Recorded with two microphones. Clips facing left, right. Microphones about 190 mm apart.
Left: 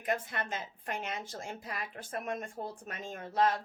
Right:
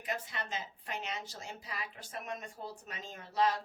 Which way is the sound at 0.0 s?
50° left (ahead or behind).